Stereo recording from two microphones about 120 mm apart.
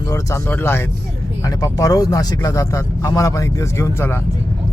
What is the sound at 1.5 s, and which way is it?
Speech, 30° left (ahead or behind).